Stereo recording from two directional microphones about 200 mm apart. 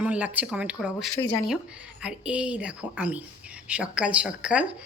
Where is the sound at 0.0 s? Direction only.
5° right (ahead or behind).